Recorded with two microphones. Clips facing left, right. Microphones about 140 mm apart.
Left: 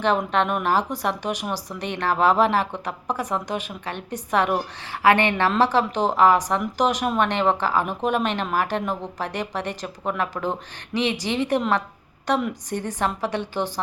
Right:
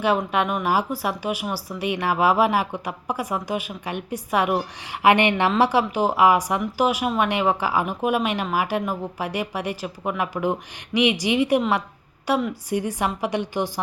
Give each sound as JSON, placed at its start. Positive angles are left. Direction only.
{"t": 0.0, "sound": "a woman's voice", "side_deg": -10}